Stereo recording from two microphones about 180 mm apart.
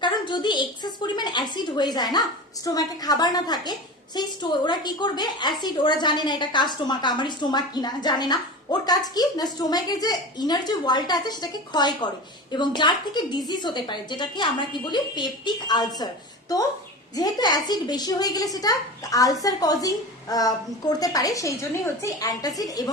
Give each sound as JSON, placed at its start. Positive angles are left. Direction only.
{"t": 0.0, "sound": "a woman's voice", "side_deg": 25}
{"t": 17.2, "sound": "a woman's voice", "side_deg": 20}